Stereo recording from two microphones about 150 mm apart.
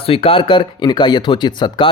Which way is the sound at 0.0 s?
40° left (ahead or behind).